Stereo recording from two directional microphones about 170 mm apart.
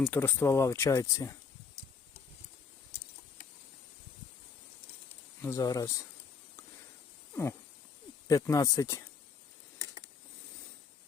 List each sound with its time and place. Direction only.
0.1 s speech: 10° left (ahead or behind)
5.4 s speech: 15° left (ahead or behind)
8.3 s speech: 20° left (ahead or behind)